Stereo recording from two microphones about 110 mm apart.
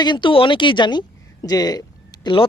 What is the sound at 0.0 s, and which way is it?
Speech, 45° left (ahead or behind).